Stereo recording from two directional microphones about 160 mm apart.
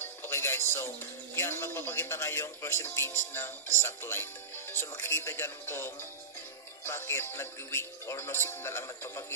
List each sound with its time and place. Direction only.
0.0 s speech: 15° left (ahead or behind)